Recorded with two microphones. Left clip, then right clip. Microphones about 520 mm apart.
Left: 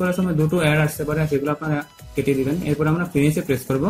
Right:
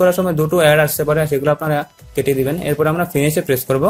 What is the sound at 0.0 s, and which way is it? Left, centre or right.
Speech, centre.